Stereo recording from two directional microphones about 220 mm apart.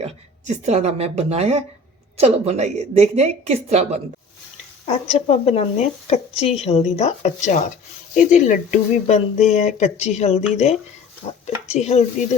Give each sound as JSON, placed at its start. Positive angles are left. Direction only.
{"t": 0.0, "sound": "a woman's voice", "side_deg": -30}
{"t": 4.9, "sound": "speech", "side_deg": 30}
{"t": 11.8, "sound": "speech", "side_deg": 30}